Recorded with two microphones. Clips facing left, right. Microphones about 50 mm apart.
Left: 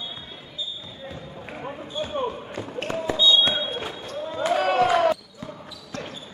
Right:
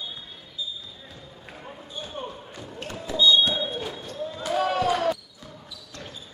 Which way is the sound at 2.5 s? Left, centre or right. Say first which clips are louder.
Left 8 dB; left.